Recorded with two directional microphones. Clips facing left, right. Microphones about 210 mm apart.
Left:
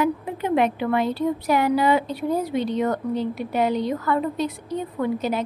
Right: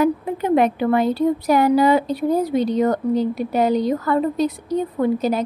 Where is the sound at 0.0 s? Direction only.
40° right (ahead or behind).